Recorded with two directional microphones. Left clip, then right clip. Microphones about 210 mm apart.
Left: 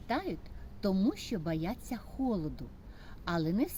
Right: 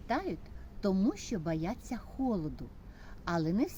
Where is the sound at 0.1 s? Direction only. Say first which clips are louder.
Right 1 dB; 5° left (ahead or behind).